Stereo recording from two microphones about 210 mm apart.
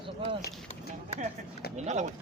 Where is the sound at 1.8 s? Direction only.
35° right (ahead or behind).